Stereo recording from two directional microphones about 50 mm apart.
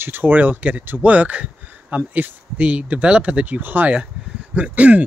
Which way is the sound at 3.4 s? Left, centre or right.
Right.